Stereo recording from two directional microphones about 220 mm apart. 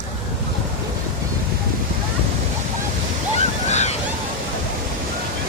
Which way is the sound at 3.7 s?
30° left (ahead or behind).